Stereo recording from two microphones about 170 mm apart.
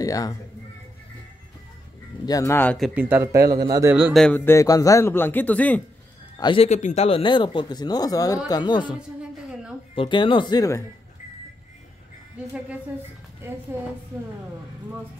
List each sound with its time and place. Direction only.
0.0 s speech: 20° left (ahead or behind)
2.2 s a man's voice: 20° left (ahead or behind)
2.9 s speech: 10° right (ahead or behind)
4.1 s speech: 5° left (ahead or behind)
4.5 s a man's voice: 20° left (ahead or behind)
6.3 s speech: 30° left (ahead or behind)
13.4 s a woman's voice: 15° right (ahead or behind)